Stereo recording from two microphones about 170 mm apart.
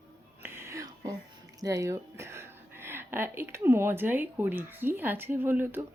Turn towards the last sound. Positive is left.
turn(degrees=-10)  # may be behind; listen again after turning